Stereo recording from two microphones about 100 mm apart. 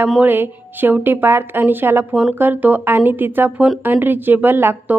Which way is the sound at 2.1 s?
10° right (ahead or behind).